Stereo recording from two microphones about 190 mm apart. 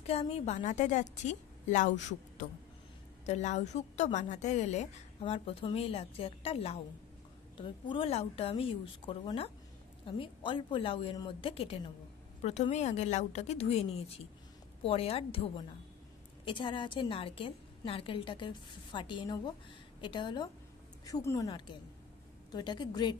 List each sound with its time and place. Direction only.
0.0 s a woman's voice: 35° left (ahead or behind)